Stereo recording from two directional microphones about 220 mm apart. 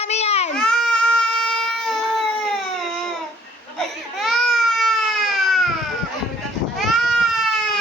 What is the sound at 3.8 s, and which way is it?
Baby cry, centre (ahead or behind).